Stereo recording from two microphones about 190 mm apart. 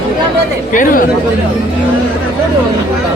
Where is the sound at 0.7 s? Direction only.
45° left (ahead or behind).